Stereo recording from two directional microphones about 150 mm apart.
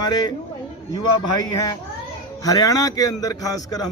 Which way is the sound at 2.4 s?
25° left (ahead or behind).